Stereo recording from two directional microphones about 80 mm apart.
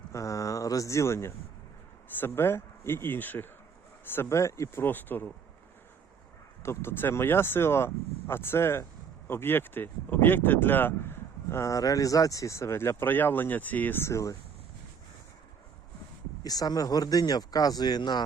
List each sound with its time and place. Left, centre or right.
0.1 s speech: left
6.6 s speech: left
14.1 s speech: left
16.4 s speech: left